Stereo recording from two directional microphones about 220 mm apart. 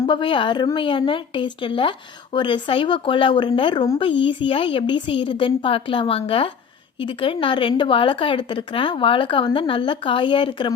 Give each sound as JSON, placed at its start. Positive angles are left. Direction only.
{"t": 0.0, "sound": "speech", "side_deg": 20}